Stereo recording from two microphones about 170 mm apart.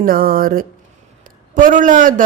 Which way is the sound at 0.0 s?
55° right (ahead or behind).